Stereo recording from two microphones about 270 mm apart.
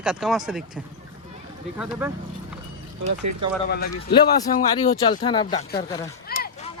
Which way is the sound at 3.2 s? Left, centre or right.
Right.